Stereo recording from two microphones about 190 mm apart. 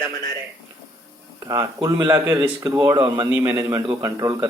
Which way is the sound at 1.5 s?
15° right (ahead or behind).